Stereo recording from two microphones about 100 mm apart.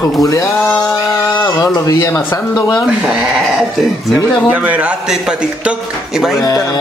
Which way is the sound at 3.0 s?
10° right (ahead or behind).